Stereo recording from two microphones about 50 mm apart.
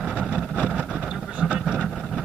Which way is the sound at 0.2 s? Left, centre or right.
Right.